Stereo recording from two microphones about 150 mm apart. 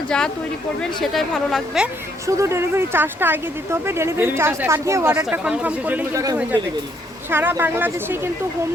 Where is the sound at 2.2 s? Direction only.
20° right (ahead or behind).